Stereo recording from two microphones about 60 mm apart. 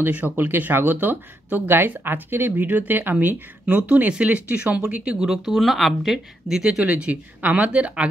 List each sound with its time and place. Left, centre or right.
0.0 s speech: right; by 6.8 s centre
6.8 s speech: right